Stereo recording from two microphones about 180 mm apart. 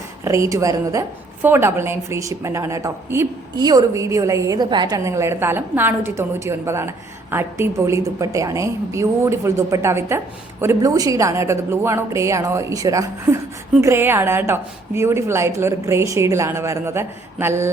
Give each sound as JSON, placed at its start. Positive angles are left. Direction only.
{"t": 0.3, "sound": "a woman's voice", "side_deg": -15}